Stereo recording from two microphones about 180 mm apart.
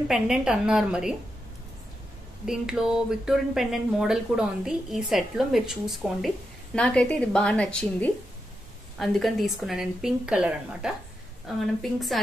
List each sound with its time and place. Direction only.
0.1 s speech: 5° right (ahead or behind)
2.4 s speech: 5° right (ahead or behind)